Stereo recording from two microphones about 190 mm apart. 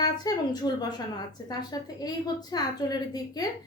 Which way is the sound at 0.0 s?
20° left (ahead or behind).